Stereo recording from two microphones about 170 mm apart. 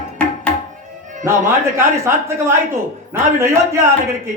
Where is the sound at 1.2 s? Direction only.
15° right (ahead or behind).